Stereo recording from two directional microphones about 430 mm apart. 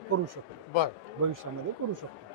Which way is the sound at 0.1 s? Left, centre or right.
Right.